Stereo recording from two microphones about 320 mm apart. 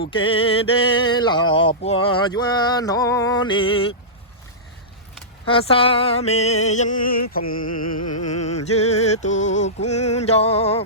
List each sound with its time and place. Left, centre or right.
0.1 s a sound: centre
5.5 s music: centre
7.7 s music: left
8.4 s music: centre